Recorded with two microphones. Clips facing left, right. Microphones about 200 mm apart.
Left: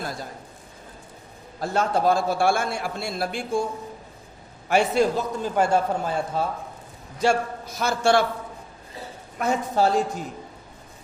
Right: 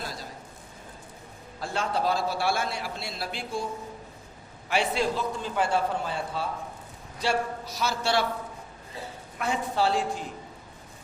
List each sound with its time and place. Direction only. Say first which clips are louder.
0.0 s a sound: left 5 dB; 50° left (ahead or behind)
1.5 s a man's voice: left 6 dB; 45° left (ahead or behind)
4.7 s a man's voice: left 6 dB; 45° left (ahead or behind)
9.4 s a man's voice: left 5 dB; 45° left (ahead or behind)